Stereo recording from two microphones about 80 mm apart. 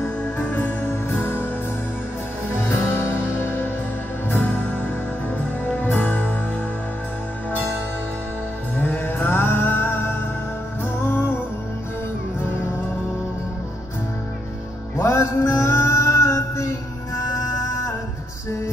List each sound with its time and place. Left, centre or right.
0.0 s music: left
2.7 s music: left
8.7 s music: left
15.0 s music: left